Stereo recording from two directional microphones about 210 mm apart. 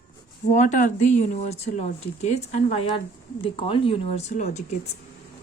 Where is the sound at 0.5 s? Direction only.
35° left (ahead or behind).